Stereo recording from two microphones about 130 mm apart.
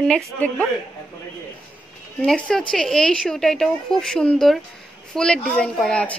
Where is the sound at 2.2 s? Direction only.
10° left (ahead or behind).